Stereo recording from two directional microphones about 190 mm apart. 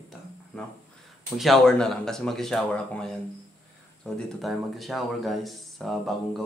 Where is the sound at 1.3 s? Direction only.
Centre (ahead or behind).